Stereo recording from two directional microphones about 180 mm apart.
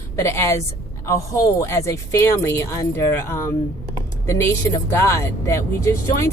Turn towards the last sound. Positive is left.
turn(degrees=15)  # may be behind; listen again after turning